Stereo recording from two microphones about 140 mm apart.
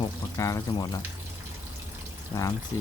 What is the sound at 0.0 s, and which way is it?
Speech, 25° left (ahead or behind).